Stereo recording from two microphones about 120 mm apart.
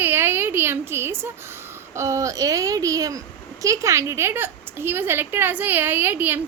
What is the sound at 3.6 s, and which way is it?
A woman's voice, 25° right (ahead or behind).